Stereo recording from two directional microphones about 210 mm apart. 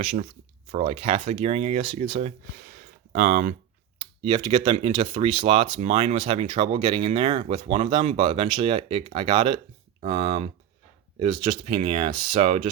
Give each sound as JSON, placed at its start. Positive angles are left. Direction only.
{"t": 0.0, "sound": "speech", "side_deg": -35}
{"t": 2.7, "sound": "a sound", "side_deg": -40}
{"t": 4.2, "sound": "speech", "side_deg": -25}